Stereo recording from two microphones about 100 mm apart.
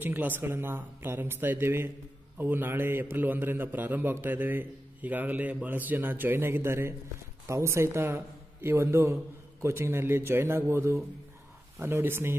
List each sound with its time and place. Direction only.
0.0 s a man's voice: 20° right (ahead or behind)